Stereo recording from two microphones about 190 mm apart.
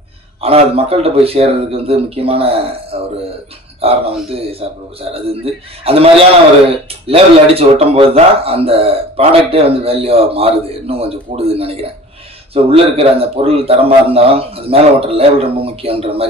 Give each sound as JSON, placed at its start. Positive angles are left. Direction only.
{"t": 0.4, "sound": "speech", "side_deg": -30}